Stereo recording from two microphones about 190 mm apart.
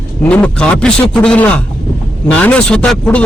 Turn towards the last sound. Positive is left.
turn(degrees=5)  # may be behind; listen again after turning